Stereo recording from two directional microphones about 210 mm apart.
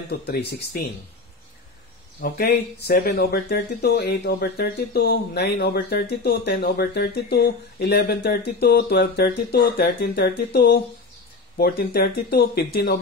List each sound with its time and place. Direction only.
0.3 s speech: 50° left (ahead or behind)
2.1 s speech: 45° left (ahead or behind)